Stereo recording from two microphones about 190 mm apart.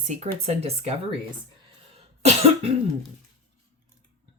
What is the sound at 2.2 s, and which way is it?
Cough, 35° right (ahead or behind).